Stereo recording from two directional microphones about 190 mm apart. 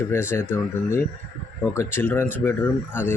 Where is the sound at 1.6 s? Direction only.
15° left (ahead or behind).